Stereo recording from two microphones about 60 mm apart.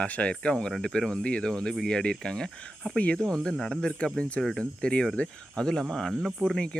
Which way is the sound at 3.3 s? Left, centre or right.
Centre.